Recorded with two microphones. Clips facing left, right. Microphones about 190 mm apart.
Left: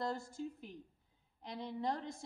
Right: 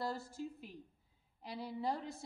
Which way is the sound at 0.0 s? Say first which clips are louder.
Left 1 dB; 5° right (ahead or behind).